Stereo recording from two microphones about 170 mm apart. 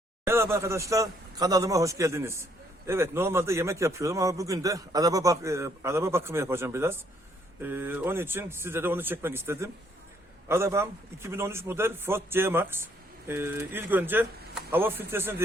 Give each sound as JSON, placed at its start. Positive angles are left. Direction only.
{"t": 0.5, "sound": "a man's voice", "side_deg": -15}